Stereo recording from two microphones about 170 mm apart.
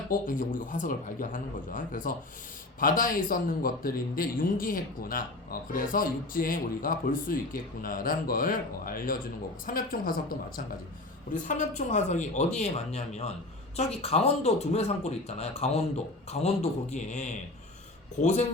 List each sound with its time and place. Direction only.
0.1 s a man's voice: 55° left (ahead or behind)
11.4 s speech: 45° left (ahead or behind)